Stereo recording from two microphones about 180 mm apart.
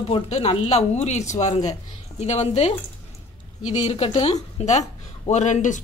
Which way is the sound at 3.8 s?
30° left (ahead or behind).